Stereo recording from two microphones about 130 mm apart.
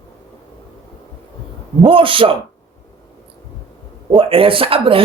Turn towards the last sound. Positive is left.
turn(degrees=-45)  # may be behind; listen again after turning